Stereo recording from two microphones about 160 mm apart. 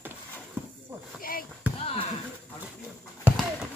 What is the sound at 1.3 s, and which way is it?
Basketball bounce, 65° left (ahead or behind).